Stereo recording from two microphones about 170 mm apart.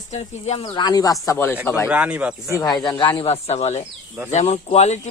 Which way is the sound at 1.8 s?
10° right (ahead or behind).